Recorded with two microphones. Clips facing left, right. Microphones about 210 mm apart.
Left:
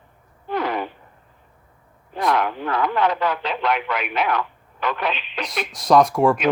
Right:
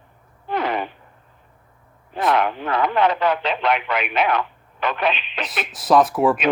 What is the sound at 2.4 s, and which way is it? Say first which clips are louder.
Radio: right 2 dB; 25° right (ahead or behind).